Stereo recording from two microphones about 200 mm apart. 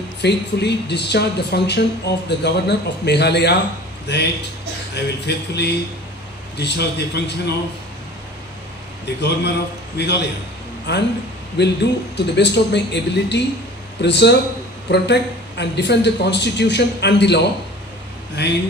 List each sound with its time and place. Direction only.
0.2 s speech: 55° left (ahead or behind)
9.0 s speech: 55° left (ahead or behind)